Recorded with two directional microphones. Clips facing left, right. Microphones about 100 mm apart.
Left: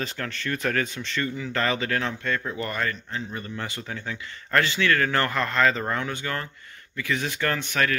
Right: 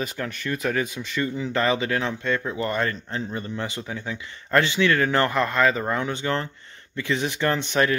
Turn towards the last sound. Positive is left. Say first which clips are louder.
# right 3 dB
turn(degrees=-20)  # may be behind; listen again after turning